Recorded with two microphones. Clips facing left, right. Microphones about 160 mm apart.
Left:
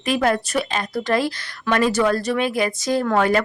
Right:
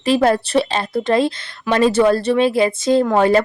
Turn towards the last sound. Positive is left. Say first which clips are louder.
# right 5 dB
turn(degrees=-25)  # may be behind; listen again after turning